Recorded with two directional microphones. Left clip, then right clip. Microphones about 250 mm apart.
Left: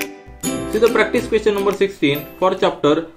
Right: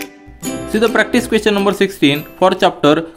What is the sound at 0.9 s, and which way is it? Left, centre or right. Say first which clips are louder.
Speech: right 2 dB; right.